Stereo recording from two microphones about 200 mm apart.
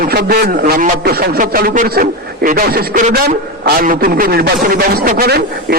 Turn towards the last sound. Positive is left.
turn(degrees=-50)  # may be behind; listen again after turning